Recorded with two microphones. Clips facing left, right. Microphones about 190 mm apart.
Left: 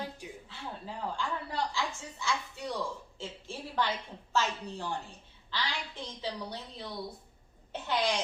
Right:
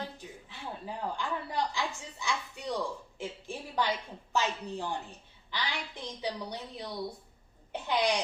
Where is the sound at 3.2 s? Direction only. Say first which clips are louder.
Right 5 dB; 15° right (ahead or behind).